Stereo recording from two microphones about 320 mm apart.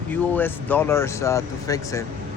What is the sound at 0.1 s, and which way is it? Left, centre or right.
Speech, centre.